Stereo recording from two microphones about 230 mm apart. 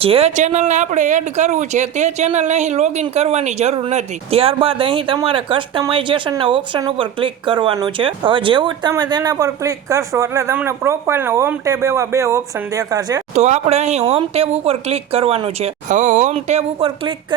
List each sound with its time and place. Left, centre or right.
0.0 s speech: right
13.3 s speech: right